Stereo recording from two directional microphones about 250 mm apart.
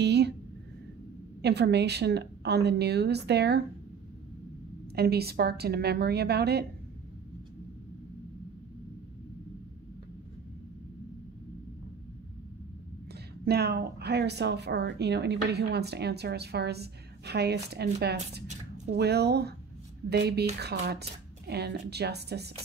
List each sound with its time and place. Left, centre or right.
0.0 s a sound: right
1.4 s a woman's voice: right
4.9 s a woman's voice: right
13.1 s a woman's voice: right
18.9 s a woman's voice: right